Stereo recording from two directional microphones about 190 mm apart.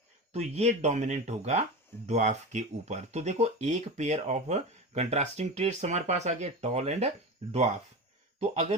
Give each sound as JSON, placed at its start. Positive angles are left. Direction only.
{"t": 0.3, "sound": "speech", "side_deg": -35}